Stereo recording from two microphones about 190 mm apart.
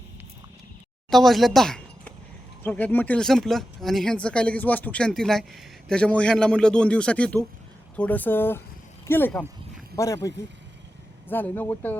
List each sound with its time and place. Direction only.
1.1 s speech: centre (ahead or behind)